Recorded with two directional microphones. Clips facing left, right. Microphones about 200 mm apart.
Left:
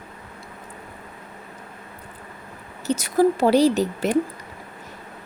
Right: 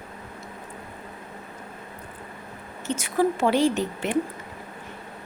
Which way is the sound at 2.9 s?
40° left (ahead or behind).